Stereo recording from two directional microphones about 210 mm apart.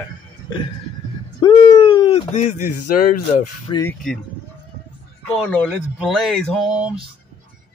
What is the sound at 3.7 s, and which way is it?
Speech, 15° left (ahead or behind).